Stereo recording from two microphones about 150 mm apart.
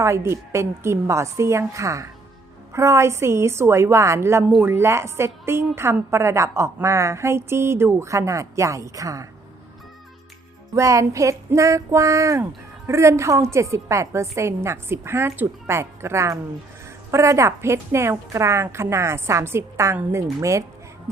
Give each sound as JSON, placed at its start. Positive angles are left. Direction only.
{"t": 0.0, "sound": "a woman's voice", "side_deg": -20}
{"t": 10.8, "sound": "a woman's voice", "side_deg": -20}